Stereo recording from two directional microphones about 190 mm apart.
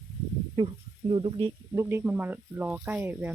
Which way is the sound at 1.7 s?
15° right (ahead or behind).